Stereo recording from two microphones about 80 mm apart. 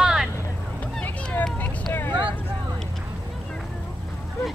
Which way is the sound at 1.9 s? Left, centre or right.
Left.